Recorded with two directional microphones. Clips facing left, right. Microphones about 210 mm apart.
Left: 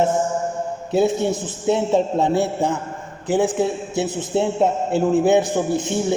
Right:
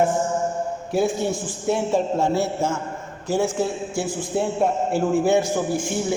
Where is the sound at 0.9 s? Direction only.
20° left (ahead or behind).